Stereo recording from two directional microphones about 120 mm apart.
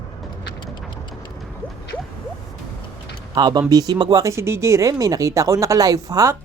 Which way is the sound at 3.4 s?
35° right (ahead or behind).